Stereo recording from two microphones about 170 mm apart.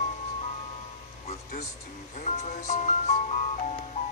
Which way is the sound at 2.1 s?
40° left (ahead or behind).